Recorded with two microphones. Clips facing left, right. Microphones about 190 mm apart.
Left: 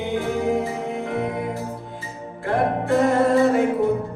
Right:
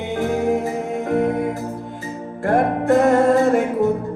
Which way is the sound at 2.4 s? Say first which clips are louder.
Right 4 dB; 45° right (ahead or behind).